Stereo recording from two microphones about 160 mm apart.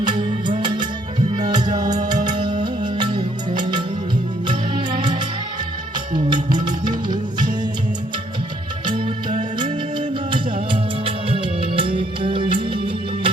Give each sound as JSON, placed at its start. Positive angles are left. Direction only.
{"t": 0.0, "sound": "music", "side_deg": -30}
{"t": 6.1, "sound": "music", "side_deg": -30}
{"t": 8.9, "sound": "music", "side_deg": -30}